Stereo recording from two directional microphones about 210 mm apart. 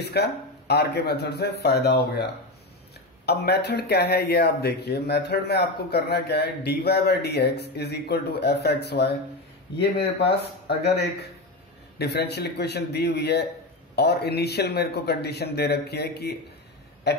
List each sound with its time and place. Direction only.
0.1 s speech: 50° left (ahead or behind)
3.3 s speech: 50° left (ahead or behind)